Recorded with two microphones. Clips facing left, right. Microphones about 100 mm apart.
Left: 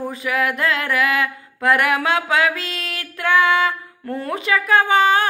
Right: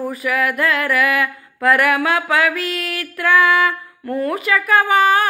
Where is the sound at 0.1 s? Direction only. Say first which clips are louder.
Right 2 dB; 25° left (ahead or behind).